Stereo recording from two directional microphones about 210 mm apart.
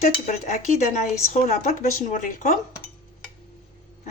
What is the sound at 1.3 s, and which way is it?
Speech, 35° left (ahead or behind).